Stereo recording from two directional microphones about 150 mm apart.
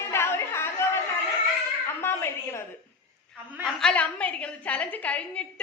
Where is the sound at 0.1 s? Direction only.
15° left (ahead or behind).